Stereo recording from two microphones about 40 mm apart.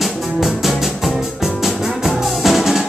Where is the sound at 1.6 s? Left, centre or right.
Centre.